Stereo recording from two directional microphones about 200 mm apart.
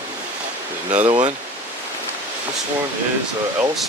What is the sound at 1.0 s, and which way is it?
Speech, 25° right (ahead or behind).